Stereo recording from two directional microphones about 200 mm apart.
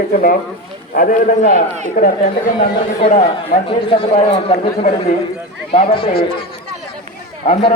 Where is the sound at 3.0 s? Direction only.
30° left (ahead or behind).